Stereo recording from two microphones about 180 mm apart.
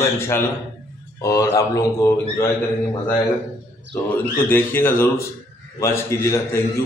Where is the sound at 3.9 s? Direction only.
10° left (ahead or behind).